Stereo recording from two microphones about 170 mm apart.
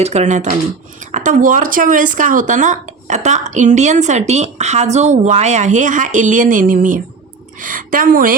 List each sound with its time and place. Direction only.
0.0 s a woman's voice: 40° right (ahead or behind)